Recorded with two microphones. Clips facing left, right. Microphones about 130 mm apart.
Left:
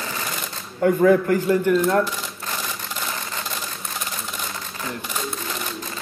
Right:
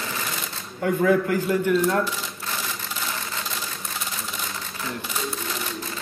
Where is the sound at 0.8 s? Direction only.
40° left (ahead or behind).